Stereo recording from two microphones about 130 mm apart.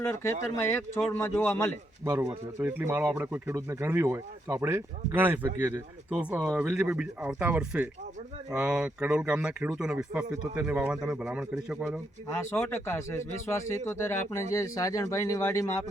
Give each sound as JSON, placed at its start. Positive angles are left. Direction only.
{"t": 0.0, "sound": "speech", "side_deg": 15}
{"t": 2.0, "sound": "speech", "side_deg": -20}
{"t": 12.4, "sound": "speech", "side_deg": 15}